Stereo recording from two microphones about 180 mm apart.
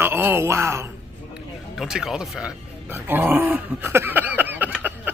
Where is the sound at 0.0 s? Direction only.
10° right (ahead or behind).